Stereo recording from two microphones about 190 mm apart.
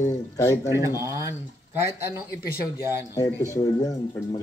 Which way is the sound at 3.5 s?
15° left (ahead or behind).